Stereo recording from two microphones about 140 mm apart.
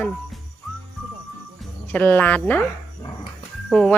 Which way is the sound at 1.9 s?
10° left (ahead or behind).